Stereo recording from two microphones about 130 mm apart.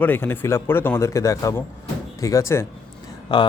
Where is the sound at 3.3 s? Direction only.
35° left (ahead or behind).